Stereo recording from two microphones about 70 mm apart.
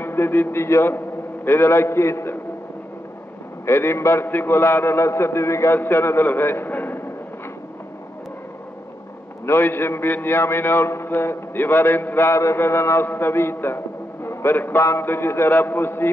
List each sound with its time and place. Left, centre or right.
0.0 s a man's voice: left
3.6 s a man's voice: left
9.5 s a man's voice: left